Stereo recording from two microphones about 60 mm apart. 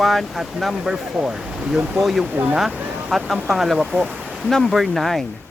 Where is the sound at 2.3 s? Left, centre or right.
Right.